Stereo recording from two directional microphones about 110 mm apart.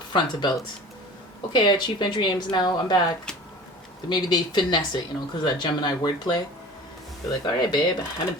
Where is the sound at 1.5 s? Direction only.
45° left (ahead or behind).